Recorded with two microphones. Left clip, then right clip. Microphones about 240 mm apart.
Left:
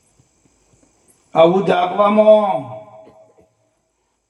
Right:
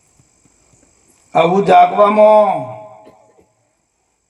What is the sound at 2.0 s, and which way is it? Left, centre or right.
Speech, right.